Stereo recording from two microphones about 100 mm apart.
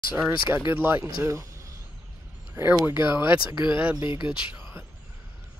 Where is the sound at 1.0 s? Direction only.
30° right (ahead or behind).